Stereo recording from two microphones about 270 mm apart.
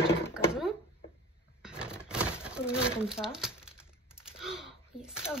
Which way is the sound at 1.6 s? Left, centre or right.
Centre.